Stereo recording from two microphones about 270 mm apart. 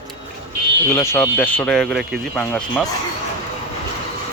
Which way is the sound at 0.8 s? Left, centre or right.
Centre.